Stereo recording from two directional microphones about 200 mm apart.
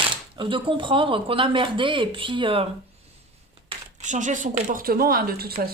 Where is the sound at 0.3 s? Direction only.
25° right (ahead or behind).